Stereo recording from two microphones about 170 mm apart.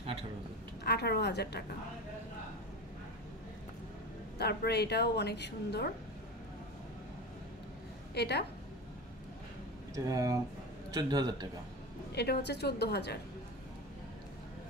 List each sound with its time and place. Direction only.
0.8 s a woman's voice: 70° left (ahead or behind)
4.4 s a woman's voice: 75° left (ahead or behind)
8.1 s a woman's voice: 75° left (ahead or behind)
9.9 s a man's voice: 20° right (ahead or behind)
12.2 s a woman's voice: 75° left (ahead or behind)